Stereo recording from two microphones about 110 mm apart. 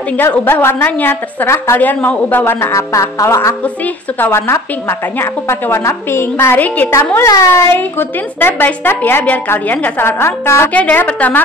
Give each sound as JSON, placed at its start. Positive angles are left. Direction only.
{"t": 0.1, "sound": "speech", "side_deg": 15}
{"t": 3.6, "sound": "speech", "side_deg": 15}